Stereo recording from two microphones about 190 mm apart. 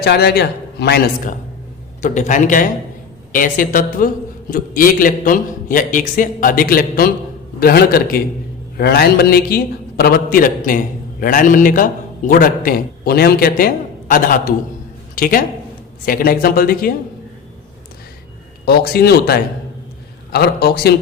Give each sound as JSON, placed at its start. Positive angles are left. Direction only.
{"t": 0.0, "sound": "a man's voice", "side_deg": 55}
{"t": 18.6, "sound": "a man's voice", "side_deg": 55}